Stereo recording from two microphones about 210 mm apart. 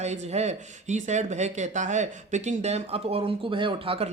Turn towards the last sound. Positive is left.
turn(degrees=-25)  # may be behind; listen again after turning